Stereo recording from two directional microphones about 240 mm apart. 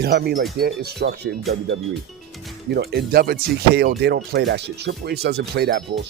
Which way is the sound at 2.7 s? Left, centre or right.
Right.